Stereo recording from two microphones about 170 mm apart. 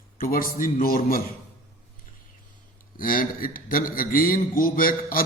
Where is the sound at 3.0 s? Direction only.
55° left (ahead or behind).